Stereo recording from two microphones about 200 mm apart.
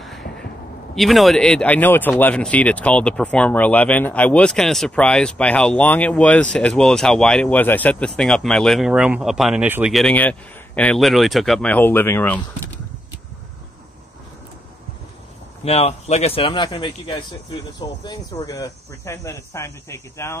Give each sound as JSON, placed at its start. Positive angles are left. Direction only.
{"t": 0.9, "sound": "speech", "side_deg": 0}
{"t": 15.6, "sound": "speech", "side_deg": 30}